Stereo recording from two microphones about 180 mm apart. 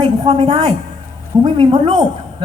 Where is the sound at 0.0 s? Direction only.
30° right (ahead or behind).